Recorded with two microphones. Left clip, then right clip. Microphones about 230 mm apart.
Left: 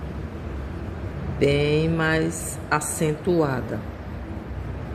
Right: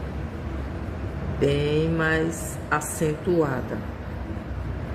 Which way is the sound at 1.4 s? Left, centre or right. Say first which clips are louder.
Left 2 dB; left.